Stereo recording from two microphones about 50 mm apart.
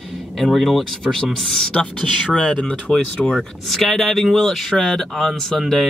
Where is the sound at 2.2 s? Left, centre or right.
Left.